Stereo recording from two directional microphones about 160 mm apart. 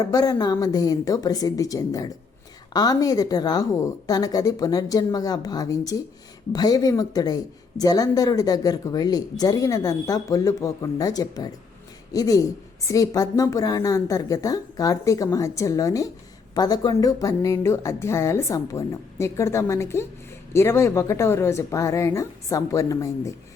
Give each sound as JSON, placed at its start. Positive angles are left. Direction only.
{"t": 0.0, "sound": "a woman's voice", "side_deg": 20}